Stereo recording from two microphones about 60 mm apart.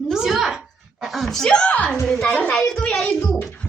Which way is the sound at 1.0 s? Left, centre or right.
Centre.